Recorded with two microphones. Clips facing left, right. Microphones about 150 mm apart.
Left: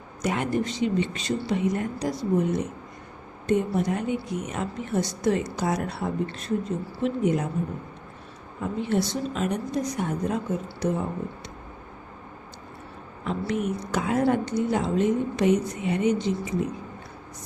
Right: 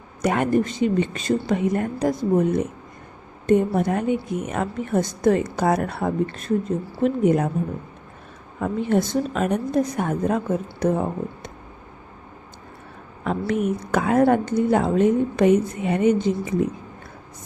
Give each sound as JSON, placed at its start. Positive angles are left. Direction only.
{"t": 0.2, "sound": "a woman's voice", "side_deg": -55}
{"t": 8.6, "sound": "a woman's voice", "side_deg": -50}
{"t": 13.2, "sound": "a woman's voice", "side_deg": -50}